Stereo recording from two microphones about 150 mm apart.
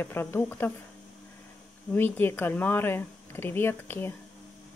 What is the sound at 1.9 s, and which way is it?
Speech, 15° left (ahead or behind).